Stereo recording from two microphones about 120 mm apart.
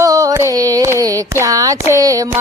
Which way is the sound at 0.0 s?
30° right (ahead or behind).